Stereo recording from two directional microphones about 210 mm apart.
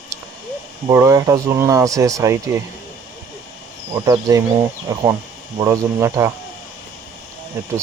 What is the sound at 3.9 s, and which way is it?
Speech, 15° right (ahead or behind).